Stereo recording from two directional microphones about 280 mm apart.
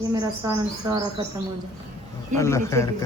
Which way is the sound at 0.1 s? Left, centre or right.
Centre.